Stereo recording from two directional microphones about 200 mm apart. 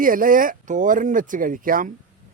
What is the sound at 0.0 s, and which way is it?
Speech, 45° right (ahead or behind).